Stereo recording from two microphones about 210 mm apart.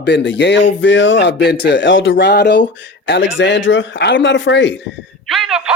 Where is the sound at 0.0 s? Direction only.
60° left (ahead or behind).